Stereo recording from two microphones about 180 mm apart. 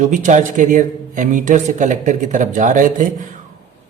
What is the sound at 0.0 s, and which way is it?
Speech, 45° right (ahead or behind).